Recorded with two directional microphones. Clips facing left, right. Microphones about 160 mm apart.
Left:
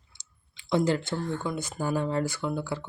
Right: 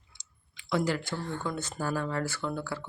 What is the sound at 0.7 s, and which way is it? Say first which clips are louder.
Speech: left 4 dB; 25° left (ahead or behind).